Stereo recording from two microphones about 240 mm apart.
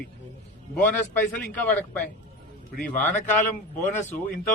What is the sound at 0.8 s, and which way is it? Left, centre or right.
A man's voice, centre.